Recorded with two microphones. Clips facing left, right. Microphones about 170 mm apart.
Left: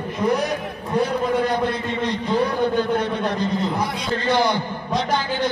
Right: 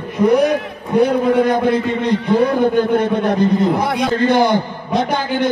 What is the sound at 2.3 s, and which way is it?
A man's voice, 50° right (ahead or behind).